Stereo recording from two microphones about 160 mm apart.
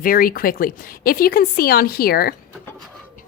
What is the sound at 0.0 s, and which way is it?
Speech, 65° left (ahead or behind).